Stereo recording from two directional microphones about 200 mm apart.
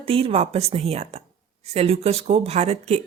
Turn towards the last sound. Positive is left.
turn(degrees=-30)  # may be behind; listen again after turning